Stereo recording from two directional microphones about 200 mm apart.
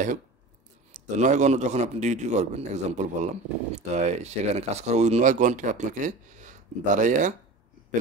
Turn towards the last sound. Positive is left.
turn(degrees=-40)  # may be behind; listen again after turning